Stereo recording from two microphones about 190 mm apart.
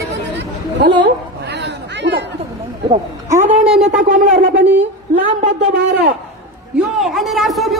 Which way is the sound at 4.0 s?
45° right (ahead or behind).